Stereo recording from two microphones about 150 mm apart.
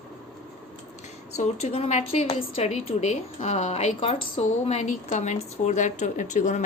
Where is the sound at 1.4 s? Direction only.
40° left (ahead or behind).